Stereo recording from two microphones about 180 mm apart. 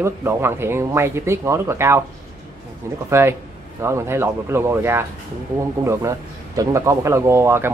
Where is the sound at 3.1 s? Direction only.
15° right (ahead or behind).